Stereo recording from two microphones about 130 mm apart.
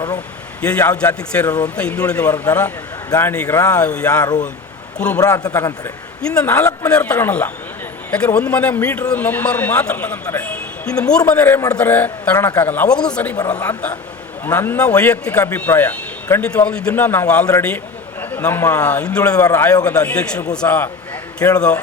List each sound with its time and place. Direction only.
0.6 s a man's voice: 10° left (ahead or behind)
3.7 s speech: 10° left (ahead or behind)
5.1 s a man's voice: 30° left (ahead or behind)
6.3 s speech: 10° left (ahead or behind)
13.3 s a man's voice: 30° left (ahead or behind)
14.4 s speech: 15° left (ahead or behind)
19.4 s a man's voice: 20° left (ahead or behind)
20.1 s speech: 10° left (ahead or behind)